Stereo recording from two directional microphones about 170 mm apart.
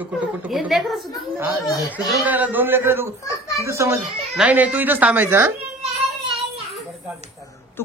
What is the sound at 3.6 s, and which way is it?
Speech, 15° right (ahead or behind).